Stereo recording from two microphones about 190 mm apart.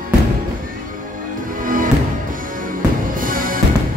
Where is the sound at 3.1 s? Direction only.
45° right (ahead or behind).